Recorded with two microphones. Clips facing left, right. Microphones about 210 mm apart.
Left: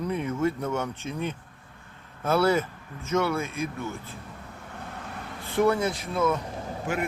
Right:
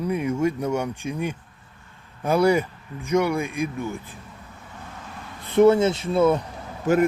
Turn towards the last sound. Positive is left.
turn(degrees=-40)  # may be behind; listen again after turning